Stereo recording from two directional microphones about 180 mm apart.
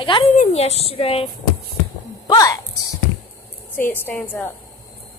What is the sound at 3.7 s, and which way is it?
Speech, 10° left (ahead or behind).